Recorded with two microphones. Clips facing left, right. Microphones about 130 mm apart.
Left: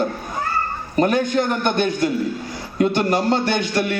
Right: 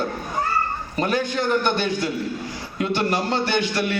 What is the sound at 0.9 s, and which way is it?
A man's voice, 45° left (ahead or behind).